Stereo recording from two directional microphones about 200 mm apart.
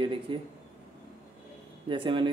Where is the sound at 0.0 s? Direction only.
25° right (ahead or behind).